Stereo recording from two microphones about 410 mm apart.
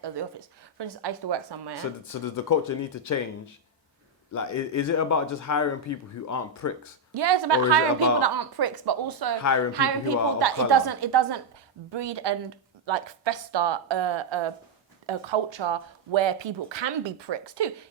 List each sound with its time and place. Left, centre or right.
0.0 s speech: right
2.2 s speech: left
4.4 s speech: left
7.1 s a woman's voice: right
11.9 s speech: right